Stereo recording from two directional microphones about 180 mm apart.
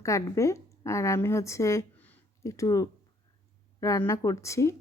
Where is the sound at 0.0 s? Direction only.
15° left (ahead or behind).